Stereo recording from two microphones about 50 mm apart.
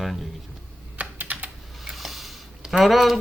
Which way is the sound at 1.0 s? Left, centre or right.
Right.